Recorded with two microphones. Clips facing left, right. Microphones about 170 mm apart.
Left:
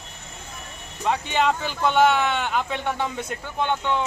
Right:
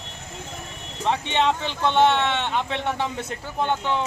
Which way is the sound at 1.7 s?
5° left (ahead or behind).